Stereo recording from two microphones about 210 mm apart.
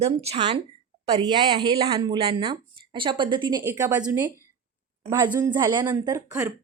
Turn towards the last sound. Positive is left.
turn(degrees=-15)  # may be behind; listen again after turning